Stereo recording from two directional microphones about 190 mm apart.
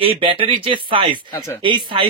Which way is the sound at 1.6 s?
25° right (ahead or behind).